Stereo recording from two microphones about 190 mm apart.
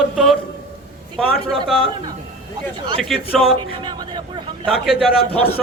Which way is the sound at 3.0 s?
Centre (ahead or behind).